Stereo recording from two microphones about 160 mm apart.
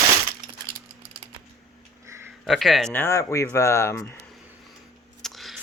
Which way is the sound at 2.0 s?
15° right (ahead or behind).